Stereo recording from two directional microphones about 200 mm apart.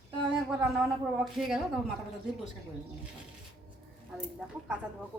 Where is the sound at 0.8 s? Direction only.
Centre (ahead or behind).